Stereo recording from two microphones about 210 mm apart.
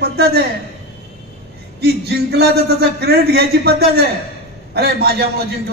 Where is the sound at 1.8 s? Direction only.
50° right (ahead or behind).